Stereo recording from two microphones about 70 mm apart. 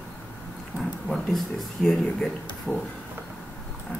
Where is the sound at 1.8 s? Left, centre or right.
Centre.